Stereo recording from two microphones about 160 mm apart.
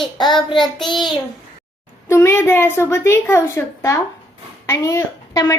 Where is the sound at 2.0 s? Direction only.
15° left (ahead or behind).